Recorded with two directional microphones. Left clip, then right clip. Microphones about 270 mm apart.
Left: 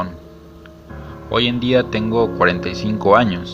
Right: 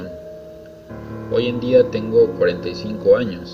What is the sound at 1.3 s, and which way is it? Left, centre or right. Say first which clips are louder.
Speech: right 1 dB; left.